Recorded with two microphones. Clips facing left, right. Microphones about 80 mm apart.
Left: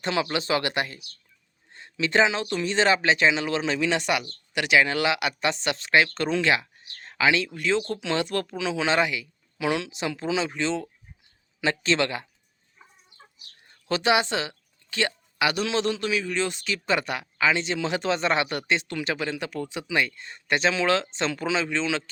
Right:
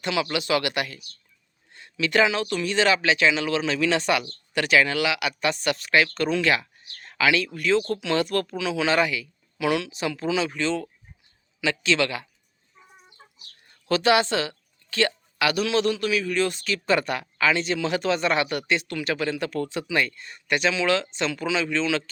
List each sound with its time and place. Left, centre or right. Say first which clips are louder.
0.0 s speech: even; left
4.9 s speech: even; left
11.6 s speech: right 1 dB; left
13.8 s speech: right 2 dB; centre